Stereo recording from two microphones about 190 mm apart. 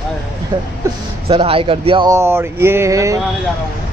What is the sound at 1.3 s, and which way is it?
Speech, 30° right (ahead or behind).